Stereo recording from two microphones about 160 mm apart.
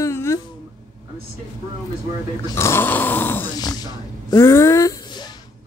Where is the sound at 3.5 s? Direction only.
25° left (ahead or behind).